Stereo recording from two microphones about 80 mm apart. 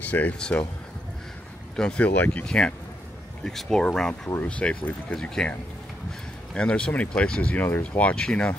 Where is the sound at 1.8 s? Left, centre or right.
Centre.